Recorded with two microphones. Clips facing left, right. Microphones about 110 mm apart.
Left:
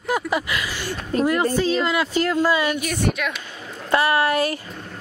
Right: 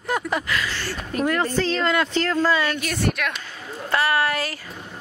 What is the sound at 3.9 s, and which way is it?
Speech, 20° left (ahead or behind).